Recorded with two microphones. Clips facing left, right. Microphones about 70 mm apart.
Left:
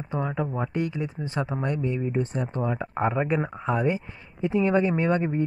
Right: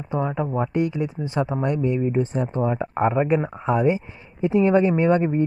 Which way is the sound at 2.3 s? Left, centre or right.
Right.